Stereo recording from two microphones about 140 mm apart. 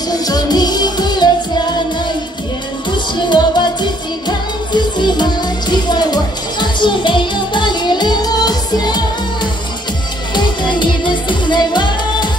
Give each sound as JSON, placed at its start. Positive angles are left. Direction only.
{"t": 0.1, "sound": "music", "side_deg": 30}
{"t": 3.2, "sound": "music", "side_deg": 35}